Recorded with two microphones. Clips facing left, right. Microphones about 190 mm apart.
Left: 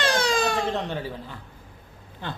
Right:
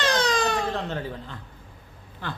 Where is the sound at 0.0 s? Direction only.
10° left (ahead or behind).